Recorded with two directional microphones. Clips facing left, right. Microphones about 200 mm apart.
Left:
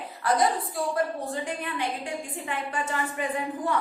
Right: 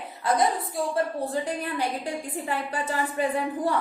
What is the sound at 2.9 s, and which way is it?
Speech, 35° right (ahead or behind).